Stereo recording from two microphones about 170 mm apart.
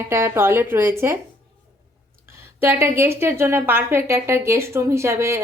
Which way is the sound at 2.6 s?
15° right (ahead or behind).